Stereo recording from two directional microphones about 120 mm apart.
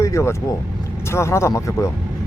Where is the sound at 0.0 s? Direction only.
25° left (ahead or behind).